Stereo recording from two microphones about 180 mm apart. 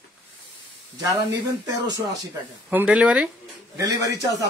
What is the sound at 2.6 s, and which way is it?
Speech, 5° right (ahead or behind).